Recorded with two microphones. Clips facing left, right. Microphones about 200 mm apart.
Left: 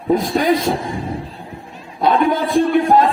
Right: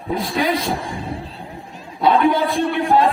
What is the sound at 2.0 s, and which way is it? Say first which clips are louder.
Speech: even; 45° left (ahead or behind).